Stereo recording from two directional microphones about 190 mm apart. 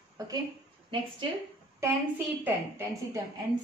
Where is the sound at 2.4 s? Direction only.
15° right (ahead or behind).